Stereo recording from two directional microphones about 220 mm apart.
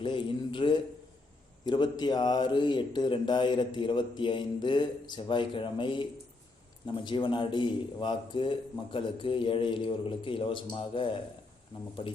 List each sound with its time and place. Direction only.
0.0 s speech: 20° left (ahead or behind)